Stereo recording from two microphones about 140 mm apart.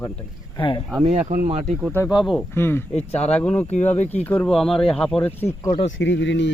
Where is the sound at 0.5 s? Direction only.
35° left (ahead or behind).